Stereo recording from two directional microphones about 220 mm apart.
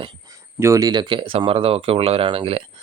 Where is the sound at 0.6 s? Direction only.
15° right (ahead or behind).